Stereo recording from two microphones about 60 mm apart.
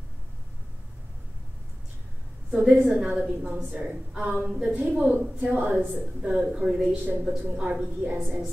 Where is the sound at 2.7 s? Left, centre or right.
Centre.